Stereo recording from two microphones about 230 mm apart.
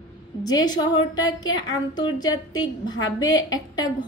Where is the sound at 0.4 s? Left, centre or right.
Centre.